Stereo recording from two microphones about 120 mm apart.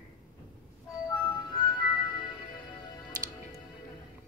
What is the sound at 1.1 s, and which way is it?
Music, 35° left (ahead or behind).